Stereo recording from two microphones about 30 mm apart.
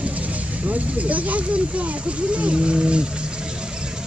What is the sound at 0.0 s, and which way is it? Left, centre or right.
Vehicle, right.